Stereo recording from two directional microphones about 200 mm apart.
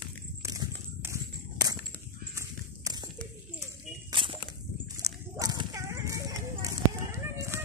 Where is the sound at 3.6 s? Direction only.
25° right (ahead or behind).